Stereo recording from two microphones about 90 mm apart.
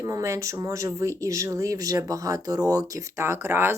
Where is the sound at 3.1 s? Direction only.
30° right (ahead or behind).